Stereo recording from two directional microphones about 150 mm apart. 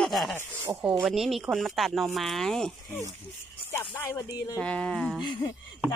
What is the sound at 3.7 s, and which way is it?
Speech, 15° left (ahead or behind).